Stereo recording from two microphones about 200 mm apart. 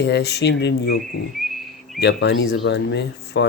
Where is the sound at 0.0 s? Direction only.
55° left (ahead or behind).